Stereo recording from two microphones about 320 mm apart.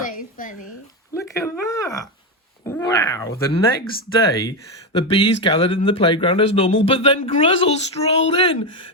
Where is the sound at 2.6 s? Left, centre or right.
Centre.